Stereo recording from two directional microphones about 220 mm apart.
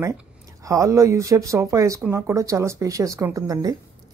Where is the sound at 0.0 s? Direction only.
15° right (ahead or behind).